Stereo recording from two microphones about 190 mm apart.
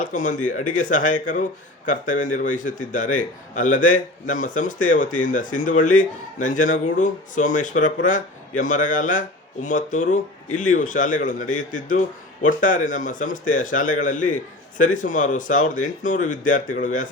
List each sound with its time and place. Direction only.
0.0 s a man's voice: 40° left (ahead or behind)